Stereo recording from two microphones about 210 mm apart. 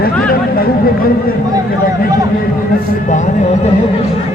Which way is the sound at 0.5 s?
45° left (ahead or behind).